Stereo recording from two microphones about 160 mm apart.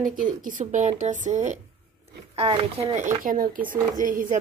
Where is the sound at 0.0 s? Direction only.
55° right (ahead or behind).